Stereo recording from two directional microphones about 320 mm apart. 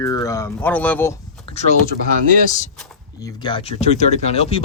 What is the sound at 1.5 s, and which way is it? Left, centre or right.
Speech, centre.